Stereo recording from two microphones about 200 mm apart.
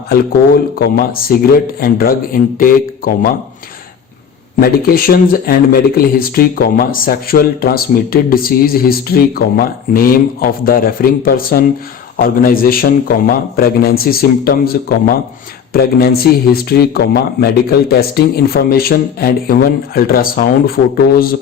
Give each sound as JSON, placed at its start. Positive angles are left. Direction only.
{"t": 0.1, "sound": "speech", "side_deg": 50}
{"t": 4.6, "sound": "speech", "side_deg": 50}